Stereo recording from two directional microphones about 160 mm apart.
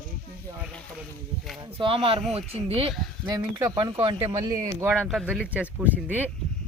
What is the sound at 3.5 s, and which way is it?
Speech, 25° right (ahead or behind).